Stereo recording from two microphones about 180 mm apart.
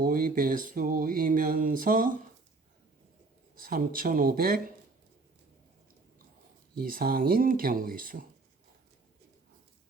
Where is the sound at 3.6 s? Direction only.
50° right (ahead or behind).